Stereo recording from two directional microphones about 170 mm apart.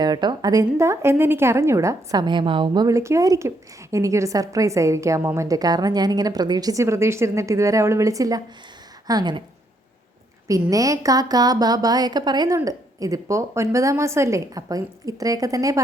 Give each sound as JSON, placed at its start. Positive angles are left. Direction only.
{"t": 0.0, "sound": "a woman's voice", "side_deg": -25}
{"t": 10.5, "sound": "a woman's voice", "side_deg": -20}